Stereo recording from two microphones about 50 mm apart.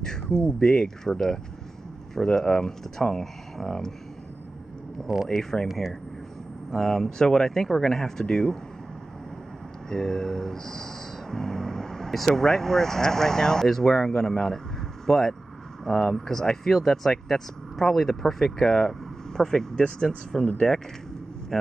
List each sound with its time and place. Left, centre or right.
0.5 s speech: centre
5.0 s speech: centre
5.4 s speech: centre
6.7 s speech: centre
9.8 s speech: centre